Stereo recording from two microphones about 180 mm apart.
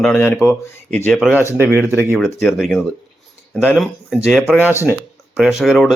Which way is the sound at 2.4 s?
Centre (ahead or behind).